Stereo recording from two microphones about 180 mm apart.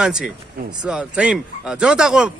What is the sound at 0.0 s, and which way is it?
A man's voice, 5° right (ahead or behind).